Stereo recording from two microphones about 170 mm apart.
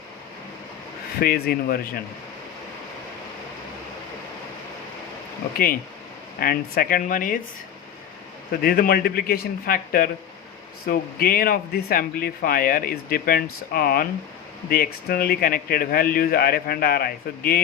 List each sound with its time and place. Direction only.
1.2 s speech: 60° left (ahead or behind)
6.4 s speech: 60° left (ahead or behind)
8.6 s speech: 60° left (ahead or behind)